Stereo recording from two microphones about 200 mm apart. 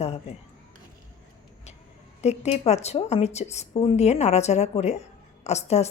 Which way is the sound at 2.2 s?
35° left (ahead or behind).